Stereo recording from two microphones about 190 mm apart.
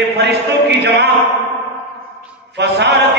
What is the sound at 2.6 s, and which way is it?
Mantra, 60° right (ahead or behind).